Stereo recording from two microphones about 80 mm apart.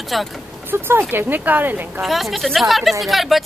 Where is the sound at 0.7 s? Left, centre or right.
Right.